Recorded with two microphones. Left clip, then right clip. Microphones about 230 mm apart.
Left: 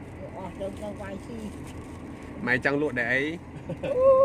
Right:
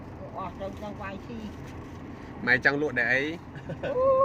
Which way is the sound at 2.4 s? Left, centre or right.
Centre.